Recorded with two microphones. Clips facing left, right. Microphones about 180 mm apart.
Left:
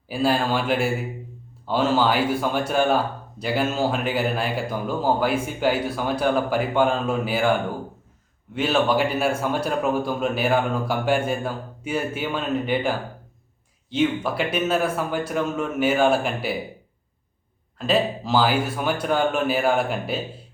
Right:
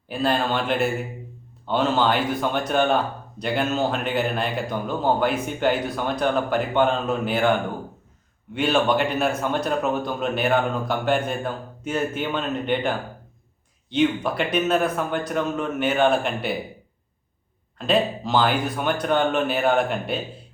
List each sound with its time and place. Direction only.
0.1 s speech: 5° left (ahead or behind)
8.5 s a man's voice: centre (ahead or behind)
17.7 s a man's voice: 5° left (ahead or behind)